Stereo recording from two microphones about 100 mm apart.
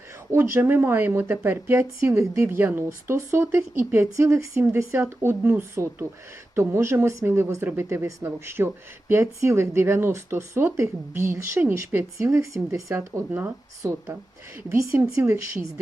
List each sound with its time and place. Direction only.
0.3 s speech: 25° right (ahead or behind)